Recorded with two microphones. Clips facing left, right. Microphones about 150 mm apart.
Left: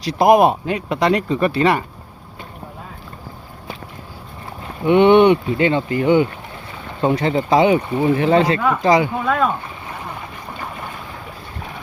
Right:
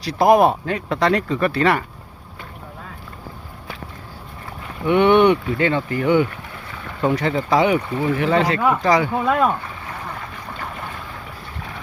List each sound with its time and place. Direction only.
0.0 s speech: 20° left (ahead or behind)
4.8 s speech: 25° left (ahead or behind)
9.2 s speech: 15° right (ahead or behind)
9.5 s boat: 20° left (ahead or behind)